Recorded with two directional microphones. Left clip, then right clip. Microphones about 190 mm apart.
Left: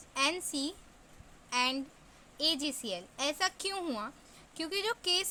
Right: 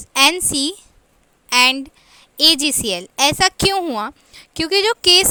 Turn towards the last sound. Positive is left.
turn(degrees=-50)  # may be behind; listen again after turning